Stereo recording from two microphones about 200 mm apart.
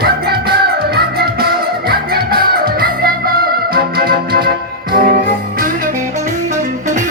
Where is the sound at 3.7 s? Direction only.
50° right (ahead or behind).